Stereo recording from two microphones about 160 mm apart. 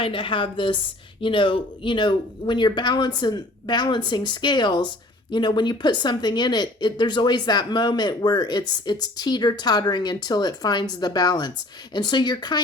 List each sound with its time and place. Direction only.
0.0 s a woman's voice: 30° left (ahead or behind)